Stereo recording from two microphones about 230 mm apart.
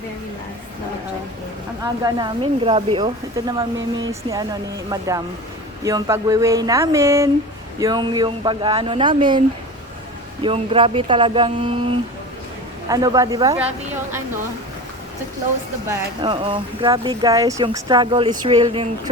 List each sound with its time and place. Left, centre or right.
1.8 s speech: centre
10.4 s speech: right
15.9 s speech: right